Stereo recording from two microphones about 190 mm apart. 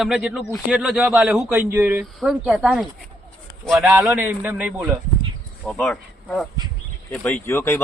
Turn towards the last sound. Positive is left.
turn(degrees=15)  # may be behind; listen again after turning